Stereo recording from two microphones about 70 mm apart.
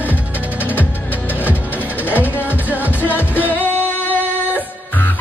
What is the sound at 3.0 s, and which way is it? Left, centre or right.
Music, left.